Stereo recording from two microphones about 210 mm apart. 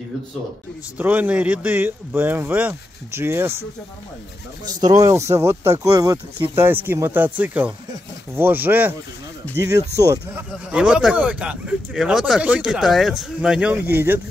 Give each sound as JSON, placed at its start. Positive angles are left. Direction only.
{"t": 0.9, "sound": "speech", "side_deg": -10}
{"t": 4.6, "sound": "speech", "side_deg": -20}
{"t": 9.9, "sound": "speech", "side_deg": -15}
{"t": 10.7, "sound": "speech", "side_deg": -5}